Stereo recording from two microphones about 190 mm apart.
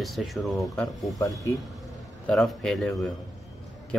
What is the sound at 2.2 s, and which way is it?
Speech, centre (ahead or behind).